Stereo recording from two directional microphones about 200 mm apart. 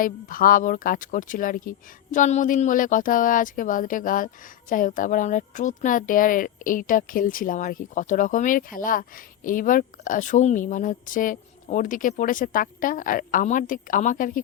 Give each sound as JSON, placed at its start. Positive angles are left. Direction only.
{"t": 0.0, "sound": "speech", "side_deg": 45}